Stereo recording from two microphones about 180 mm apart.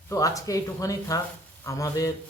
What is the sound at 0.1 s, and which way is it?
Speech, 20° left (ahead or behind).